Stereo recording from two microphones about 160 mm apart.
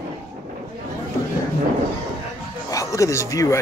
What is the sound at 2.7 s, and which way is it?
Speech, 20° left (ahead or behind).